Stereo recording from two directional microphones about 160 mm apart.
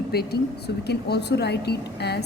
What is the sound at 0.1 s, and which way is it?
Speech, 80° left.